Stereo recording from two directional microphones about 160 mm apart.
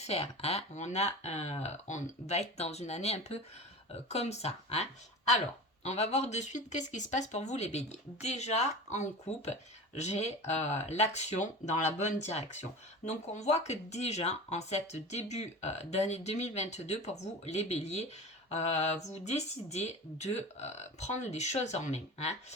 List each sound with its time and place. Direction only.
0.0 s speech: 40° left (ahead or behind)